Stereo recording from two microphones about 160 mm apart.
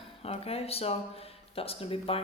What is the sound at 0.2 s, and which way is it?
Speech, 40° left (ahead or behind).